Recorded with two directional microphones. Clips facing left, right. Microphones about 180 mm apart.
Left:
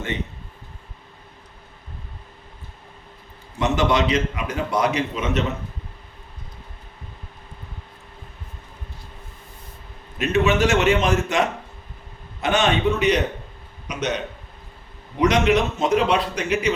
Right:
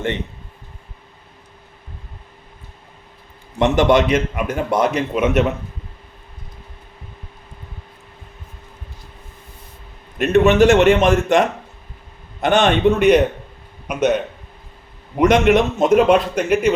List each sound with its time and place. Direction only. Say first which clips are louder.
3.6 s a man's voice: right 6 dB; 50° right (ahead or behind)
10.2 s a man's voice: right 7 dB; 50° right (ahead or behind)
15.2 s a man's voice: right 5 dB; 50° right (ahead or behind)